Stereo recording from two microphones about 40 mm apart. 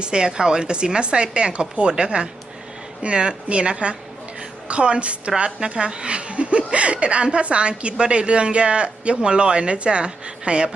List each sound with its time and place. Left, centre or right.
0.0 s a woman's voice: centre